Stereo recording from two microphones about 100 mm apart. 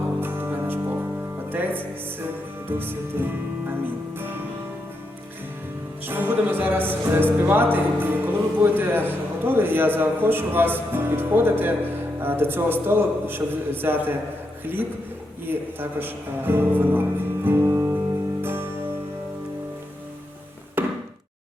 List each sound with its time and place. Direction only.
0.2 s music: 20° right (ahead or behind)
1.5 s speech: 20° right (ahead or behind)
4.2 s music: 20° right (ahead or behind)
6.1 s speech: 20° right (ahead or behind)
18.4 s music: 20° right (ahead or behind)
20.8 s chop: 20° right (ahead or behind)